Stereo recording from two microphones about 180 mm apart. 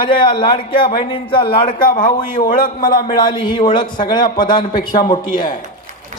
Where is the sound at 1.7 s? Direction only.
50° left (ahead or behind).